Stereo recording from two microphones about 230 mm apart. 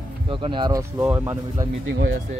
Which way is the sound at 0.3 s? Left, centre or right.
Right.